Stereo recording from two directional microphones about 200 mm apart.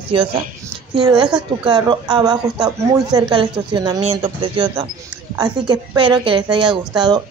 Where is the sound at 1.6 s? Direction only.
20° right (ahead or behind).